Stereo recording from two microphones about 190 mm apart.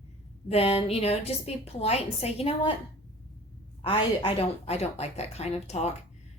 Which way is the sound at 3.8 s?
25° left (ahead or behind).